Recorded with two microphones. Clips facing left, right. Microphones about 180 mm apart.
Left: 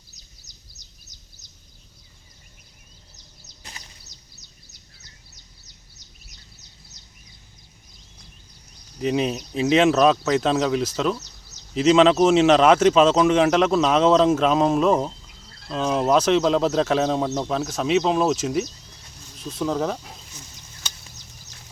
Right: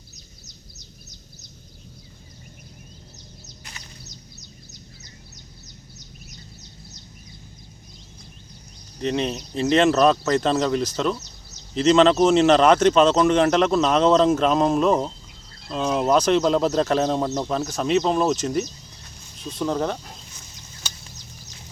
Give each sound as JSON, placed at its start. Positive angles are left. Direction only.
{"t": 9.0, "sound": "speech", "side_deg": 5}